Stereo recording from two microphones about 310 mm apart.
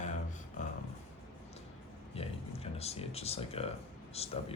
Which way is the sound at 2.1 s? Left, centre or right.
Centre.